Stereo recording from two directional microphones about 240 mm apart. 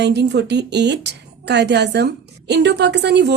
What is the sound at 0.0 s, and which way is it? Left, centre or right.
A woman's voice, right.